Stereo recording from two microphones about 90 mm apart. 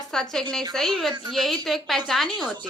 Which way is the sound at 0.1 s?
5° left (ahead or behind).